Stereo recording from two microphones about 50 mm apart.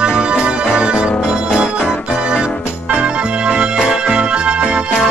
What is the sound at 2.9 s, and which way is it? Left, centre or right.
Music, right.